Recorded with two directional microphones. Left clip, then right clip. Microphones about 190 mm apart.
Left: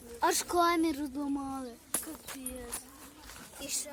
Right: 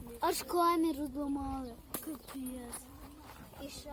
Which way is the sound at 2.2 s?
35° left (ahead or behind).